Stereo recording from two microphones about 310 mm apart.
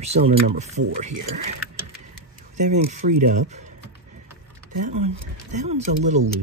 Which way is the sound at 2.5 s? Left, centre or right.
Right.